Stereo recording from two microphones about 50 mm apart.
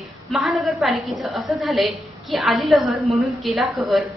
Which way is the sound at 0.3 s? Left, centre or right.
Centre.